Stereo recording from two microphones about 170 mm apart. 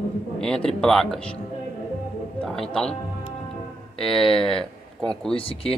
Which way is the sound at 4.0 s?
Centre (ahead or behind).